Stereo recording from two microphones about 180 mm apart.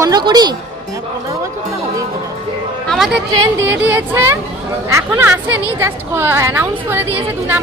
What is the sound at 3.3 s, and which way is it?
A woman's voice, 15° right (ahead or behind).